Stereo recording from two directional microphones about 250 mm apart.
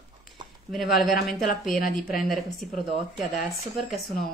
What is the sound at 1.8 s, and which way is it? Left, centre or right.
Speech, left.